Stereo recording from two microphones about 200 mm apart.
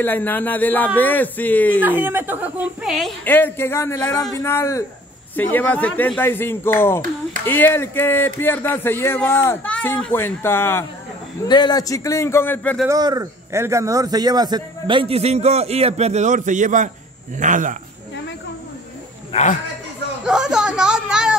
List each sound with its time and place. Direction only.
0.0 s speech: 10° left (ahead or behind)
1.9 s speech: 10° right (ahead or behind); by 12.7 s 10° left (ahead or behind)
12.8 s a man's voice: 20° right (ahead or behind); by 17.7 s 40° right (ahead or behind)
19.3 s speech: 30° left (ahead or behind)
20.2 s a sound: 5° right (ahead or behind)